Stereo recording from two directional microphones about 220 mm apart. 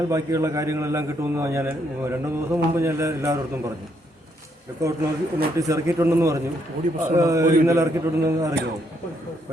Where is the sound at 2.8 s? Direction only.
15° right (ahead or behind).